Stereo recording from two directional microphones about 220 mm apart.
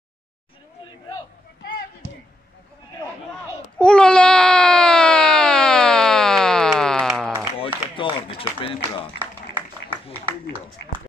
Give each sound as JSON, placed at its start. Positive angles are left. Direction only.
{"t": 3.7, "sound": "baby cry", "side_deg": 5}
{"t": 7.6, "sound": "run", "side_deg": 25}